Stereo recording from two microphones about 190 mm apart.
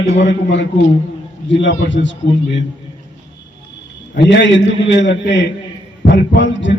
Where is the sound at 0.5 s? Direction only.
70° left (ahead or behind).